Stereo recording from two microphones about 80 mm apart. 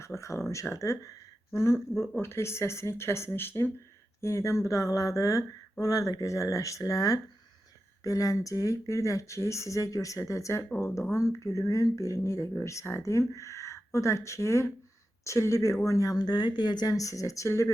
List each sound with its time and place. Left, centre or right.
0.0 s speech: left